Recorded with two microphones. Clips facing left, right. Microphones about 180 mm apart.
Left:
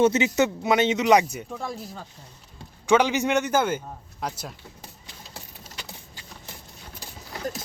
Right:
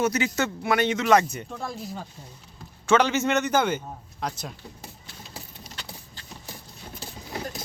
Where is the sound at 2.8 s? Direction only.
15° left (ahead or behind).